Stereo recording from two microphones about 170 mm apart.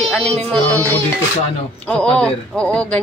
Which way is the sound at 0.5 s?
10° left (ahead or behind).